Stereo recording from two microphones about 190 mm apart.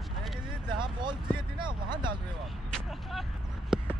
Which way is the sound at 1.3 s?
25° right (ahead or behind).